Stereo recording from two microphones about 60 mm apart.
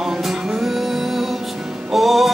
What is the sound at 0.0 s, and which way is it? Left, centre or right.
Music, centre.